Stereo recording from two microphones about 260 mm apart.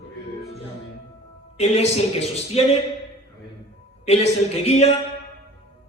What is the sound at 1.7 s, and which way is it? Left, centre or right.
Speech, left.